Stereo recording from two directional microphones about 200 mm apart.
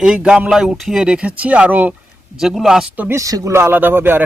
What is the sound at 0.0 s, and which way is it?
Speech, 5° right (ahead or behind).